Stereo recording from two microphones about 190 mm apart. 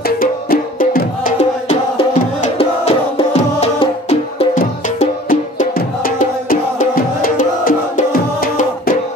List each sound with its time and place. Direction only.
0.2 s music: 50° left (ahead or behind)